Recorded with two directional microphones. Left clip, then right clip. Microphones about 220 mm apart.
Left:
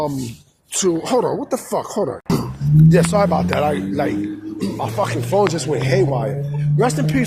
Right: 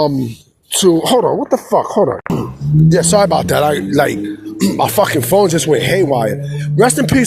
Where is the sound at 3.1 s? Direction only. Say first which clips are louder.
Right 6 dB; 40° right (ahead or behind).